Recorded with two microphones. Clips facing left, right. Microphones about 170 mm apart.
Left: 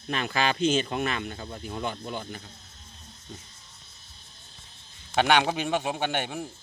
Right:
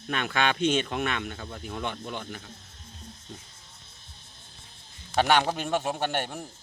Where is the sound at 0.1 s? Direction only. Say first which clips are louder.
Even; centre (ahead or behind).